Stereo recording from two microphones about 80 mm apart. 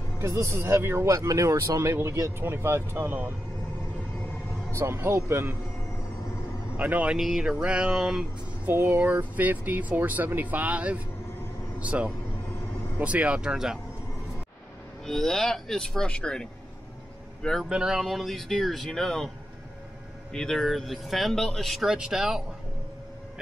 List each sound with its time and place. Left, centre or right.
0.2 s speech: right; by 3.3 s centre
4.7 s speech: right
6.8 s speech: centre
7.2 s speech: centre
8.6 s speech: right; by 13.7 s centre
15.0 s speech: centre
17.6 s speech: centre
20.3 s speech: centre
21.9 s speech: centre